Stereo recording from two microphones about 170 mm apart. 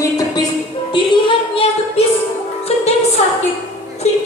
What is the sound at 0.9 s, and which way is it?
Music, 30° left (ahead or behind).